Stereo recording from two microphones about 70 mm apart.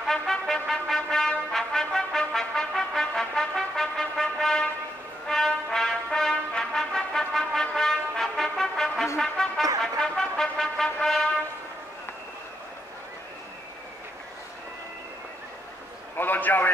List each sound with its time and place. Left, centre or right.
0.0 s trumpet: centre
5.3 s music: centre
9.2 s brass instrument: centre
9.8 s music: centre
16.2 s a sound: left